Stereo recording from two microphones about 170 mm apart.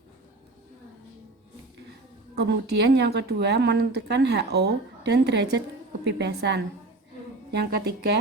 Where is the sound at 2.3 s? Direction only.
80° right.